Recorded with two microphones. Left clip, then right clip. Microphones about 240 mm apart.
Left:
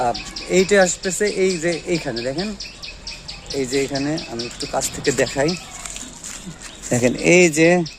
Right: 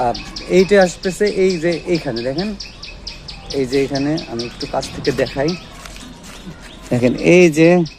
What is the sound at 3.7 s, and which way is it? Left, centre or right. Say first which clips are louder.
Speech: right 4 dB; centre.